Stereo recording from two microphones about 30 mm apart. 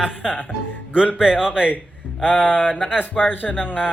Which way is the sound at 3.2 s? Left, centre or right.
Left.